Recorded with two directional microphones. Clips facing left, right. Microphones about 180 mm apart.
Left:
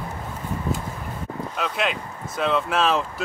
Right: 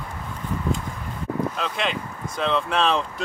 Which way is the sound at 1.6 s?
5° left (ahead or behind).